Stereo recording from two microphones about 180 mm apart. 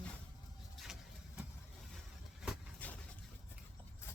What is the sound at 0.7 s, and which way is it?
Vehicle, centre (ahead or behind).